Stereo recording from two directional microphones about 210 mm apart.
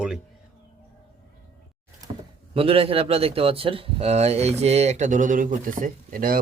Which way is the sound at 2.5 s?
25° right (ahead or behind).